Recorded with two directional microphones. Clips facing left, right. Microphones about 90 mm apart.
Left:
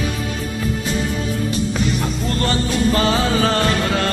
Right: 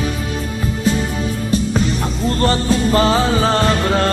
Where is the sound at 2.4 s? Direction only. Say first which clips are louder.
Right 3 dB; 35° right (ahead or behind).